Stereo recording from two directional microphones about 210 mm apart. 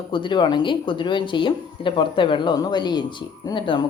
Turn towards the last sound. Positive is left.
turn(degrees=20)  # may be behind; listen again after turning